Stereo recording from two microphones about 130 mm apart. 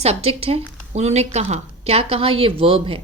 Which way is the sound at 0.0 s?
50° right (ahead or behind).